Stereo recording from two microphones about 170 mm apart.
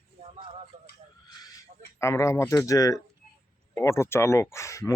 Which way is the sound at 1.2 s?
20° left (ahead or behind).